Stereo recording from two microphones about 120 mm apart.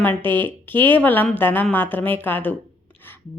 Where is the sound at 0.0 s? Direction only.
15° left (ahead or behind).